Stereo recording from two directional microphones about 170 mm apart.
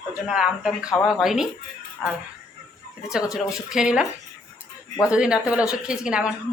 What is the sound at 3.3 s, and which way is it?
Speech, 5° right (ahead or behind).